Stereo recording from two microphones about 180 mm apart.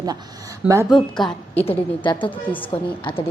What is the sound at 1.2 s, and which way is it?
A woman's voice, 25° left (ahead or behind).